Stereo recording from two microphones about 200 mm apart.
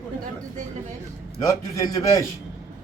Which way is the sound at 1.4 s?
15° left (ahead or behind).